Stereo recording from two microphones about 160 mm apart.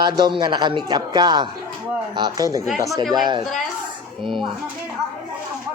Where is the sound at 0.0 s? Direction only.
30° right (ahead or behind).